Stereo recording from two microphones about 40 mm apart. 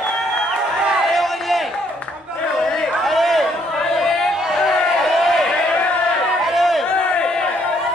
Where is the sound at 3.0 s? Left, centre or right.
Centre.